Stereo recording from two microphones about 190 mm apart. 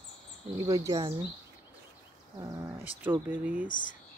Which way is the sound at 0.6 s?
20° right (ahead or behind).